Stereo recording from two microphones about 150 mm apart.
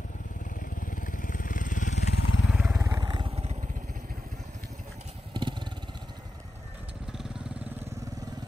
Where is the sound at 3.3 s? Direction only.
45° right (ahead or behind); by 4.1 s 70° right (ahead or behind).